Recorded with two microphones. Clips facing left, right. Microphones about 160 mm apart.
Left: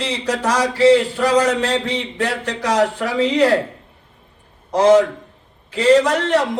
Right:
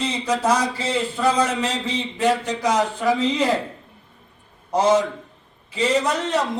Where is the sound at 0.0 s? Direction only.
70° left (ahead or behind).